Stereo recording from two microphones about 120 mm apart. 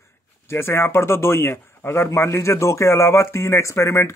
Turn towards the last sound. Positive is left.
turn(degrees=25)  # may be behind; listen again after turning